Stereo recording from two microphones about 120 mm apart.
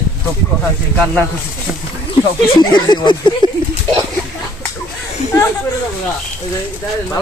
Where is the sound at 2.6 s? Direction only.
40° left (ahead or behind).